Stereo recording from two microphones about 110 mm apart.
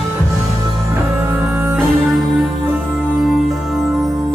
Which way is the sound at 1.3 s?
15° right (ahead or behind).